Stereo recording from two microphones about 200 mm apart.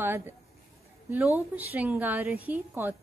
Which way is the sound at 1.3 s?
10° right (ahead or behind).